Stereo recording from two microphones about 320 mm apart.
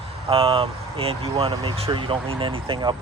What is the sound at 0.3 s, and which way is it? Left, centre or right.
Speech, centre.